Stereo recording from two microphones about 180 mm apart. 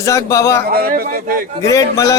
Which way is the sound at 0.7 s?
55° right (ahead or behind).